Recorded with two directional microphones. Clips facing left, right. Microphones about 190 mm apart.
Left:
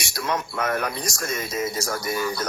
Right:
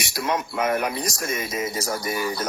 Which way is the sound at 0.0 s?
15° right (ahead or behind).